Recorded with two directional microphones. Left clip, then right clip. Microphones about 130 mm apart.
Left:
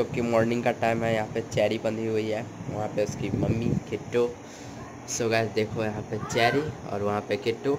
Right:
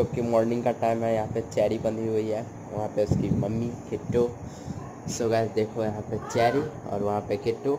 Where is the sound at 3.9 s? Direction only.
10° right (ahead or behind).